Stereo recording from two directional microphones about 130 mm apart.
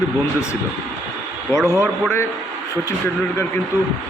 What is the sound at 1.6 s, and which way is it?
Speech, 20° left (ahead or behind).